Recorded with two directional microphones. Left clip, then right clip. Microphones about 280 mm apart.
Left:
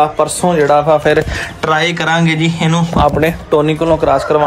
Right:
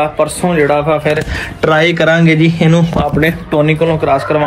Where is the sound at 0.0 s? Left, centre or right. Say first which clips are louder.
Left 1 dB; centre.